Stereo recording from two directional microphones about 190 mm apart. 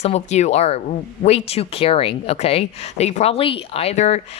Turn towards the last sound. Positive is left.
turn(degrees=35)  # may be behind; listen again after turning